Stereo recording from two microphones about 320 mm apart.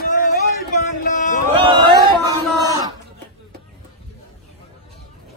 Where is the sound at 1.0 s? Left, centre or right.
Left.